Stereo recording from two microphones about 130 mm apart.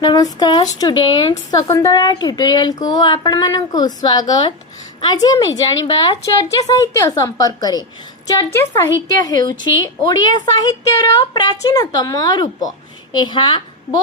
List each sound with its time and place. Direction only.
0.0 s a woman's voice: 30° left (ahead or behind)